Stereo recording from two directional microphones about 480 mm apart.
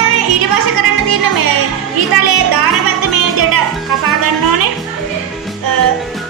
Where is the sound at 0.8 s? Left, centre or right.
Right.